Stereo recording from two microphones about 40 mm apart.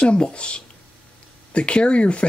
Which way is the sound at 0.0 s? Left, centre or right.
Left.